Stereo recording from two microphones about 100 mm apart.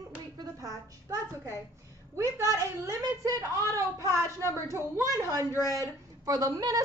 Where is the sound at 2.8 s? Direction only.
30° right (ahead or behind).